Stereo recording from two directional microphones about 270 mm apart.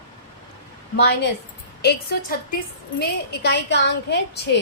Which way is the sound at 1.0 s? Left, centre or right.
Left.